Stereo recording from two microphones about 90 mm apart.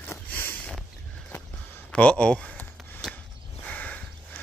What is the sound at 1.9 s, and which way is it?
Speech, 15° left (ahead or behind).